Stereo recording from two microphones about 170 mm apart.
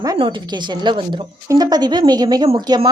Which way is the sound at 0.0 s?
25° right (ahead or behind).